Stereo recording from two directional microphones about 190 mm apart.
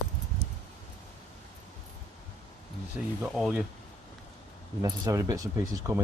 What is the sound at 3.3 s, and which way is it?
Speech, centre (ahead or behind).